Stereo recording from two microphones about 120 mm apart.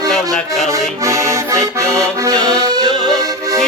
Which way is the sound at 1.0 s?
25° right (ahead or behind).